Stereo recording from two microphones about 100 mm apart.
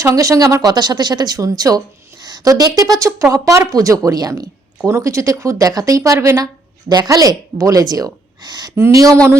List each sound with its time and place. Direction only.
0.0 s speech: 35° right (ahead or behind)
8.7 s speech: 30° right (ahead or behind)